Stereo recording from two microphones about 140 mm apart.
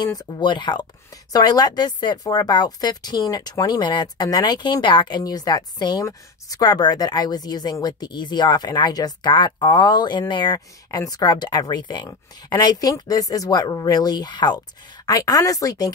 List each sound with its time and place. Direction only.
0.0 s speech: 30° left (ahead or behind)